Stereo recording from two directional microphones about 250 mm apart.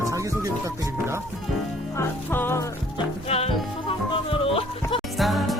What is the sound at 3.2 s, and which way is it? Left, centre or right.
Music, left.